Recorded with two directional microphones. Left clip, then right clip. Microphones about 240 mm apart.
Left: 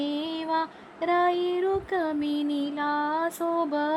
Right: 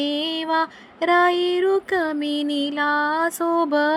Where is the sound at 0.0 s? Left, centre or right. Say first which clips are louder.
Right 6 dB; centre.